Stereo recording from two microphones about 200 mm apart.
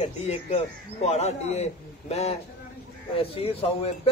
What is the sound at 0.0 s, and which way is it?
A man's voice, 35° left (ahead or behind).